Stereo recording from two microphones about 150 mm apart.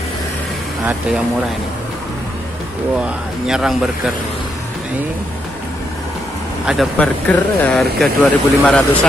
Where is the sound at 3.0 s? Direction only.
5° right (ahead or behind).